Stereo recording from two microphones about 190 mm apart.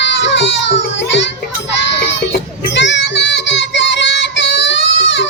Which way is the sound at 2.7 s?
70° left (ahead or behind).